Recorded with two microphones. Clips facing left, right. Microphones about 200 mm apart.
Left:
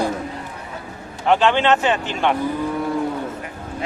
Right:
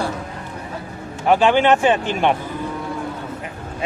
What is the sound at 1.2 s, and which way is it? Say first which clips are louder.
Speech: right 2 dB; 10° right (ahead or behind).